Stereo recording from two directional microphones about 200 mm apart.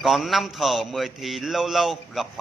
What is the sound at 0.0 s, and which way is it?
Speech, centre (ahead or behind).